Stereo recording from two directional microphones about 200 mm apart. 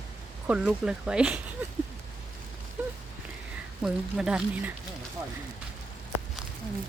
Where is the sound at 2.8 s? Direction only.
10° right (ahead or behind).